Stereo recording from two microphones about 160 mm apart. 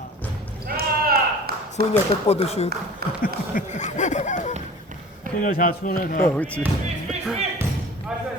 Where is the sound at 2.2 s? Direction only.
40° left (ahead or behind).